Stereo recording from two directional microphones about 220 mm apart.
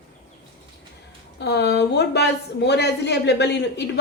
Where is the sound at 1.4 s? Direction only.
50° left (ahead or behind).